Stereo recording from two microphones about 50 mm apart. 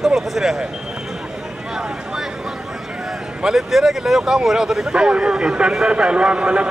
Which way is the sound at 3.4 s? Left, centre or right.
Centre.